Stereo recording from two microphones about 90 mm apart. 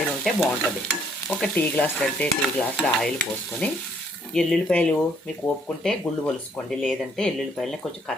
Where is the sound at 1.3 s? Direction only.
15° left (ahead or behind).